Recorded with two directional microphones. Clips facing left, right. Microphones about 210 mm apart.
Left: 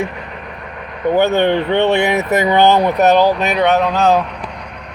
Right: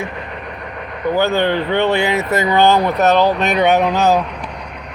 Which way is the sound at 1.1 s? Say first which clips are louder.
Left 3 dB; 20° left (ahead or behind).